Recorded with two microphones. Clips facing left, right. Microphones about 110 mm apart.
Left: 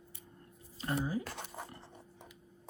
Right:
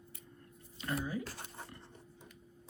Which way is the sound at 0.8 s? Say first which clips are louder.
Left 3 dB; 30° left (ahead or behind).